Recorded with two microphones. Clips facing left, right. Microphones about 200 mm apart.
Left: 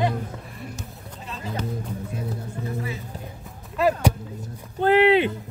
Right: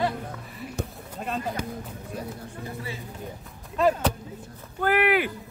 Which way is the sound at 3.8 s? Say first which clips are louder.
Left 1 dB; 10° left (ahead or behind).